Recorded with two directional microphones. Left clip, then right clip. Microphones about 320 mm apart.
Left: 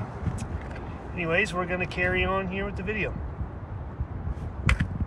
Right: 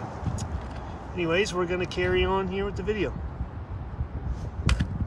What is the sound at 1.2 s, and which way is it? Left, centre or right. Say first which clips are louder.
Speech: even; centre.